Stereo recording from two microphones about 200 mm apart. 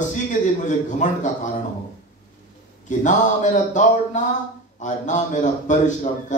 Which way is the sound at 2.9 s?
40° left (ahead or behind).